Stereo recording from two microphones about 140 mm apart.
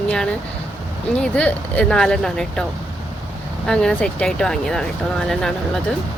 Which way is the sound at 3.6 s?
5° left (ahead or behind).